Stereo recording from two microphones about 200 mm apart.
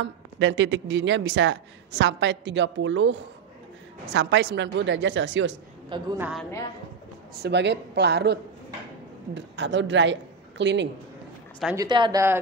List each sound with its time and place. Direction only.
0.0 s speech: 65° right (ahead or behind)
6.1 s a woman's voice: 5° right (ahead or behind)
7.4 s speech: 60° right (ahead or behind)
11.7 s speech: 20° right (ahead or behind)